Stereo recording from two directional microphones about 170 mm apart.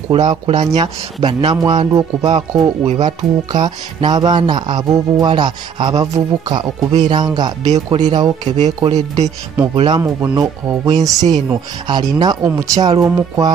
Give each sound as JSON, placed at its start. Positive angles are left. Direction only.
{"t": 0.1, "sound": "speech", "side_deg": -30}
{"t": 7.6, "sound": "speech", "side_deg": -40}
{"t": 9.8, "sound": "speech", "side_deg": -25}